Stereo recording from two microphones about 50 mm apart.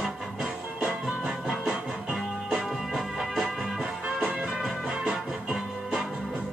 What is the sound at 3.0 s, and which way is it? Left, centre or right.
Music, centre.